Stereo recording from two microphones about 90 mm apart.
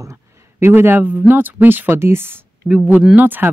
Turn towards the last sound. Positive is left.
turn(degrees=-20)  # may be behind; listen again after turning